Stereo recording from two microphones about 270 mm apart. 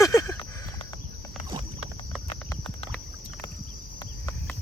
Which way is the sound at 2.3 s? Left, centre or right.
Centre.